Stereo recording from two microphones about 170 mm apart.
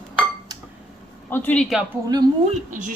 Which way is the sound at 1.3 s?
10° left (ahead or behind).